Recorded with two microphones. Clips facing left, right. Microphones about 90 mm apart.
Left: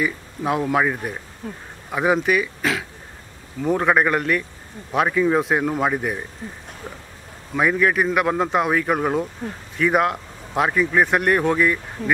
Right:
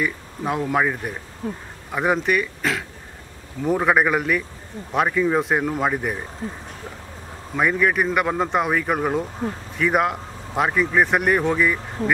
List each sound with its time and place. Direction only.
0.0 s speech: centre (ahead or behind)
7.5 s speech: centre (ahead or behind)